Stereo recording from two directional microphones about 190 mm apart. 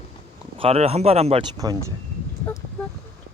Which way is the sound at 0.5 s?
30° right (ahead or behind).